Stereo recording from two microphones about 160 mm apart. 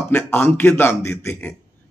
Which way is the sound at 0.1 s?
15° left (ahead or behind).